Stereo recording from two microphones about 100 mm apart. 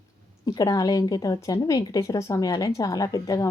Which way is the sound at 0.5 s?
35° left (ahead or behind).